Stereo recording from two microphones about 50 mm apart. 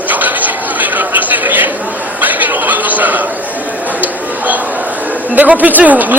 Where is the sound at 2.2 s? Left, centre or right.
Right.